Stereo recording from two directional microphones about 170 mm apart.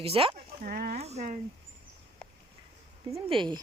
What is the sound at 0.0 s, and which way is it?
Speech, 35° right (ahead or behind).